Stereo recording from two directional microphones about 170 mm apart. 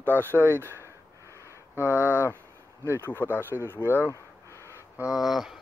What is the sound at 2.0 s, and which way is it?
Speech, 10° right (ahead or behind).